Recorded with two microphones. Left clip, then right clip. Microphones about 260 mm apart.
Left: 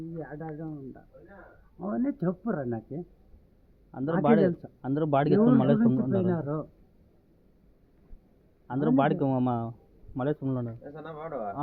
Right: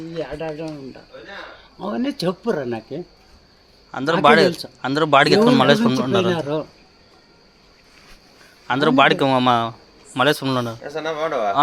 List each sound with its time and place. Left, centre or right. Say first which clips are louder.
1.8 s speech: right 8 dB; centre
3.9 s speech: right 11 dB; centre
8.6 s speech: right 11 dB; centre
10.7 s a man's voice: right 16 dB; right